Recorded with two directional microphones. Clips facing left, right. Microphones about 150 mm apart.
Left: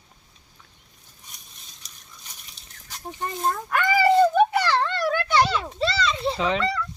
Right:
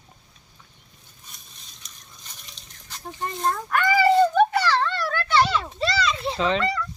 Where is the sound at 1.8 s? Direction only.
35° left (ahead or behind).